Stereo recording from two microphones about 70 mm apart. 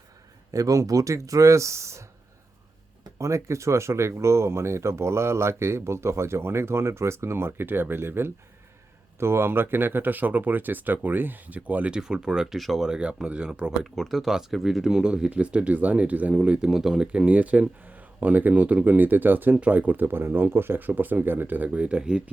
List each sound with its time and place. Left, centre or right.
0.5 s speech: right
3.2 s speech: right
11.9 s speech: centre
13.9 s speech: centre